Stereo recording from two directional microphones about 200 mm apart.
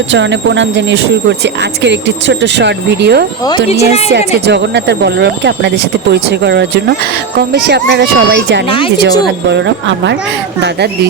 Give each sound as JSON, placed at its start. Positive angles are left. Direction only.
{"t": 0.1, "sound": "speech", "side_deg": -65}
{"t": 3.7, "sound": "a woman's voice", "side_deg": 30}
{"t": 4.1, "sound": "speech", "side_deg": -60}
{"t": 8.7, "sound": "speech", "side_deg": 25}
{"t": 9.2, "sound": "speech", "side_deg": -60}